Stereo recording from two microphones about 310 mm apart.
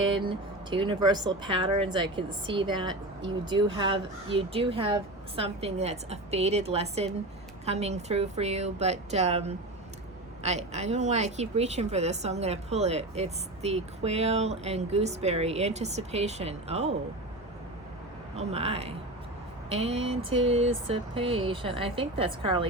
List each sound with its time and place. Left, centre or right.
0.2 s a woman's voice: centre
18.3 s a woman's voice: centre